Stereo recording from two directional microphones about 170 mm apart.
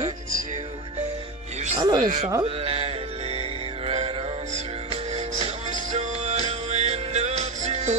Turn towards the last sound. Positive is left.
turn(degrees=-40)  # may be behind; listen again after turning